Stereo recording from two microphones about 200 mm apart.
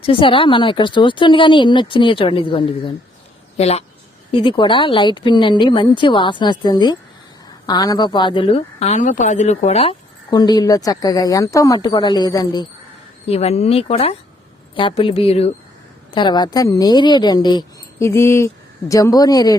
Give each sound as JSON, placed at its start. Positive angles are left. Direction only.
{"t": 0.0, "sound": "speech", "side_deg": 25}
{"t": 13.2, "sound": "speech", "side_deg": 30}